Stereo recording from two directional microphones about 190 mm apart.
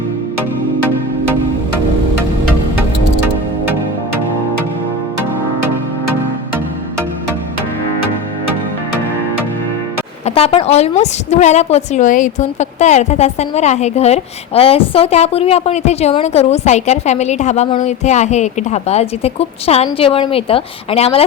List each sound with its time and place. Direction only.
10.2 s a woman's voice: 30° left (ahead or behind)